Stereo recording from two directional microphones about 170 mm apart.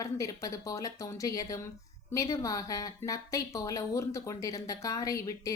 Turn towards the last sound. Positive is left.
turn(degrees=20)  # may be behind; listen again after turning